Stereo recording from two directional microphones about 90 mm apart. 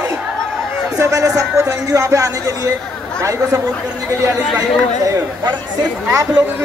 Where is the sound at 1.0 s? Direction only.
40° right (ahead or behind).